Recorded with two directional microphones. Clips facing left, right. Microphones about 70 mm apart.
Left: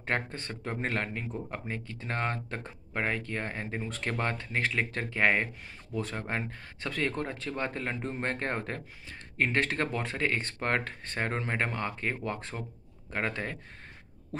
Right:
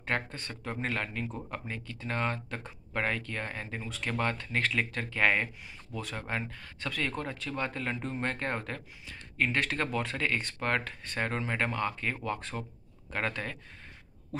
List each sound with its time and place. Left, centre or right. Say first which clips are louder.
0.0 s speech: left 1 dB; left